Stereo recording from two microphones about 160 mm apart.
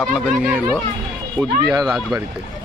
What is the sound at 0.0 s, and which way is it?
Speech, centre (ahead or behind).